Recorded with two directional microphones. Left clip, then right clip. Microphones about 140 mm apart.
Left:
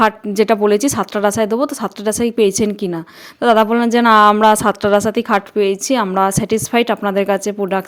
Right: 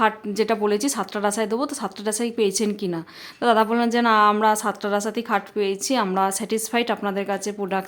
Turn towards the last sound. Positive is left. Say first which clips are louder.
# left 8 dB
turn(degrees=40)  # may be behind; listen again after turning